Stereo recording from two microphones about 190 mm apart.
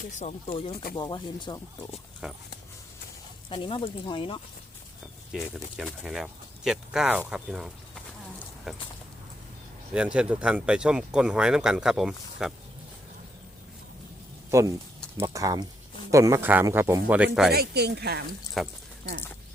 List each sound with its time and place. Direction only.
0.0 s speech: 40° left (ahead or behind); by 1.9 s 20° left (ahead or behind)
2.2 s speech: centre (ahead or behind)
3.5 s speech: 25° left (ahead or behind)
5.3 s speech: centre (ahead or behind)
9.9 s speech: 5° right (ahead or behind)
14.5 s speech: 15° right (ahead or behind)
17.5 s speech: 55° right (ahead or behind)
18.6 s speech: centre (ahead or behind)